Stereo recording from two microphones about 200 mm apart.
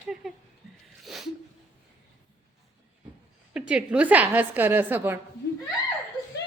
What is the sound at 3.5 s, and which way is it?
A woman's voice, 5° right (ahead or behind).